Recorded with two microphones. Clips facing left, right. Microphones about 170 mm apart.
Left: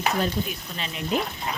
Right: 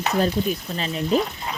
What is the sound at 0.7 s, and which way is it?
Speech, 35° right (ahead or behind).